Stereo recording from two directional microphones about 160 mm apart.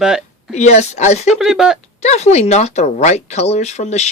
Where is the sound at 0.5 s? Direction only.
45° left (ahead or behind).